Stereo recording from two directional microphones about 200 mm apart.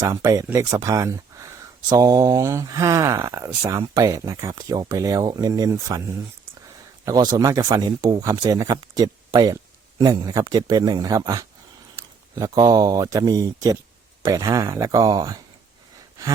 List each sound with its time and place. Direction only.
0.0 s speech: 15° right (ahead or behind)
7.0 s speech: 20° right (ahead or behind)